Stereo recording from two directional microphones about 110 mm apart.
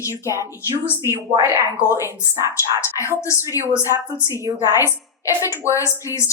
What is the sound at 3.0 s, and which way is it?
Speech, 25° left (ahead or behind).